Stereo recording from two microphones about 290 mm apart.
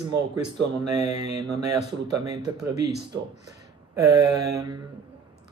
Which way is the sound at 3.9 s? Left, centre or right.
Centre.